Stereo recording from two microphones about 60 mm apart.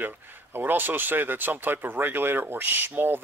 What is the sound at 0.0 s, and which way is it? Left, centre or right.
Speech, right.